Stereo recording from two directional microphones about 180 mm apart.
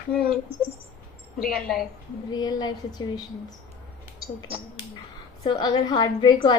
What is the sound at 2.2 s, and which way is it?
A woman's voice, 25° left (ahead or behind).